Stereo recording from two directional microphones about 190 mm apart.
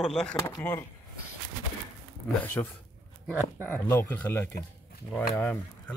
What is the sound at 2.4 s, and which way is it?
Speech, 10° left (ahead or behind).